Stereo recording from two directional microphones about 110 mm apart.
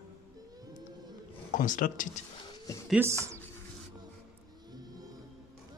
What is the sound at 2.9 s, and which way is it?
Speech, 25° right (ahead or behind).